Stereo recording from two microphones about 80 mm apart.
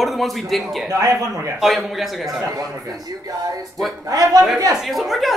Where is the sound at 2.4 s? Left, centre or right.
Right.